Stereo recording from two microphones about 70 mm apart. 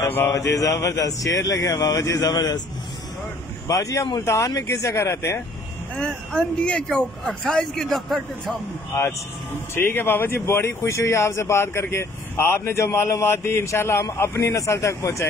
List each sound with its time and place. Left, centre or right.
0.3 s speech: left
3.6 s speech: left
5.9 s speech: centre
8.9 s speech: left
9.8 s speech: left